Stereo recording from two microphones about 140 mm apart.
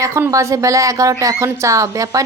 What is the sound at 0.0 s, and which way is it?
A woman's voice, 20° right (ahead or behind).